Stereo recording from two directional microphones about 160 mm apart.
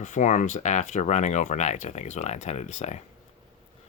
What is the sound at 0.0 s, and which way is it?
Speech, 50° left (ahead or behind).